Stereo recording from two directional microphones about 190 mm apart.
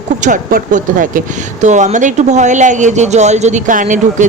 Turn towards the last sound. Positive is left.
turn(degrees=-45)  # may be behind; listen again after turning